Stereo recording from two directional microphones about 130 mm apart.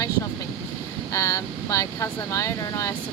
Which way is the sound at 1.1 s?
25° left (ahead or behind).